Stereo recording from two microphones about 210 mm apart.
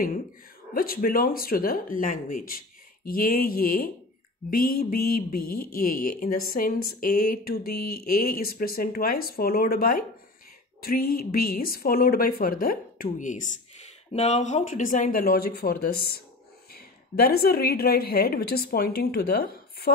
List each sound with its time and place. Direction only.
0.7 s speech: 45° left (ahead or behind)